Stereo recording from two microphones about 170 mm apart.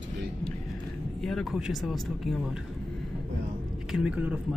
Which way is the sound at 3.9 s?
5° right (ahead or behind).